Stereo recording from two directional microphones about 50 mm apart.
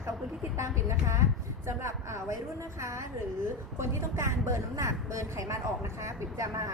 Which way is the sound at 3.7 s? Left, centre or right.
Right.